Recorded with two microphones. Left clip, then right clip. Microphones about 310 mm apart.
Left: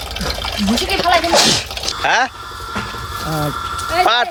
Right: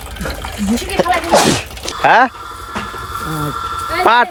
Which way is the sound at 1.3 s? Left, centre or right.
Right.